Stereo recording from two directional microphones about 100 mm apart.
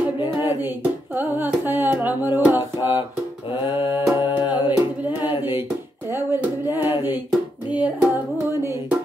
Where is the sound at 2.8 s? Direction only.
50° left (ahead or behind).